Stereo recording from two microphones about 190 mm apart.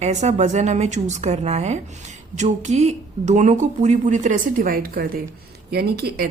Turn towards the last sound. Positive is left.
turn(degrees=-55)  # may be behind; listen again after turning